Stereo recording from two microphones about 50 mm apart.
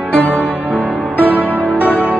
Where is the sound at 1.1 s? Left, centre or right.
Left.